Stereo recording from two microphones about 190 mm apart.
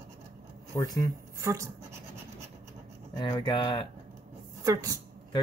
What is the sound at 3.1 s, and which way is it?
Speech, 20° left (ahead or behind).